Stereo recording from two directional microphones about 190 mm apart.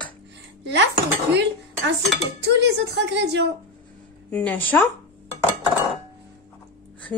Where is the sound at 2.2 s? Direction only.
70° right (ahead or behind).